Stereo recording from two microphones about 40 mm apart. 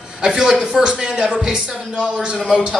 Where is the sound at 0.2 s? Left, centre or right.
Centre.